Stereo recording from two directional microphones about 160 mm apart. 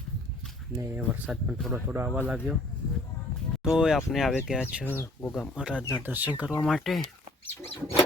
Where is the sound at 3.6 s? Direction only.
5° right (ahead or behind).